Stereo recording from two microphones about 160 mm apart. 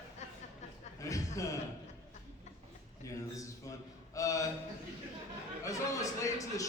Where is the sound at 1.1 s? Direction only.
20° left (ahead or behind).